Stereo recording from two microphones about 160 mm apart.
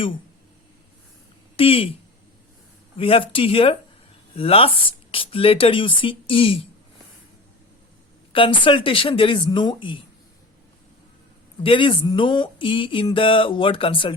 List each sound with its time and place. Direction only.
1.5 s speech: 35° left (ahead or behind)
3.0 s speech: 35° left (ahead or behind)
8.3 s speech: 35° left (ahead or behind)
11.6 s speech: 35° left (ahead or behind)